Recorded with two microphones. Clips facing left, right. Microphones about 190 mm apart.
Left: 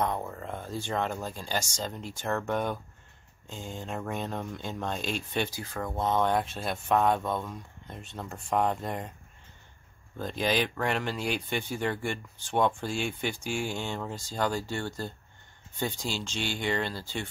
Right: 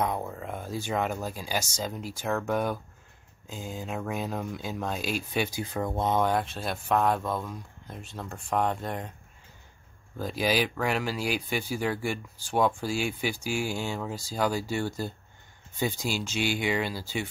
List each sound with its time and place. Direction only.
0.0 s speech: 5° right (ahead or behind)
5.6 s speech: 20° right (ahead or behind)
6.3 s speech: centre (ahead or behind)
10.1 s speech: 5° right (ahead or behind)